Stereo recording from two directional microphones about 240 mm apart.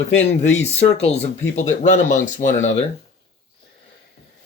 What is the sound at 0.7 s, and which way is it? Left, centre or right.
Speech, left.